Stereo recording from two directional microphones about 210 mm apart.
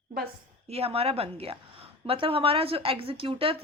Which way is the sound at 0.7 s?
30° right (ahead or behind).